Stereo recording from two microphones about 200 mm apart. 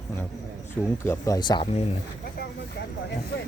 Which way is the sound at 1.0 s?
15° left (ahead or behind).